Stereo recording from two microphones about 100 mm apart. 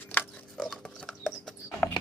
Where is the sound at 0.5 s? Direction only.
5° left (ahead or behind).